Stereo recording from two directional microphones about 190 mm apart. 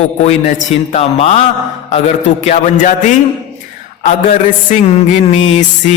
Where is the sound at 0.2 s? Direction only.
40° left (ahead or behind).